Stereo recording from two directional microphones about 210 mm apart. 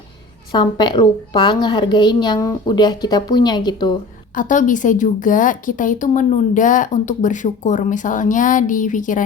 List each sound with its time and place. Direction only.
0.5 s a woman's voice: 20° left (ahead or behind)
4.4 s a woman's voice: 40° left (ahead or behind)